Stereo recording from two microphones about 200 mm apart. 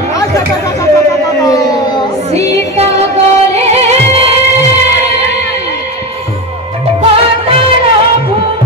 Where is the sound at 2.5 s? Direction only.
30° right (ahead or behind).